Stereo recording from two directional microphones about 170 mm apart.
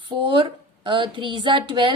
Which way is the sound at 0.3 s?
30° right (ahead or behind).